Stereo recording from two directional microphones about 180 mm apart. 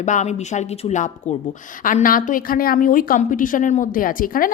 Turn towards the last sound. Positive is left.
turn(degrees=50)  # may be behind; listen again after turning